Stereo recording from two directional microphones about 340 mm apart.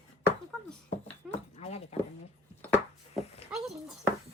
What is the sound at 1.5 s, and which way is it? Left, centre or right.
Speech, centre.